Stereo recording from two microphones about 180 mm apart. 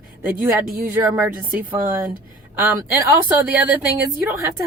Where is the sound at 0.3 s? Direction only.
50° right (ahead or behind).